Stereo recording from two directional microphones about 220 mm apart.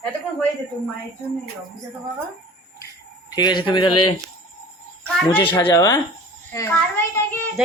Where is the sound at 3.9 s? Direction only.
90° left.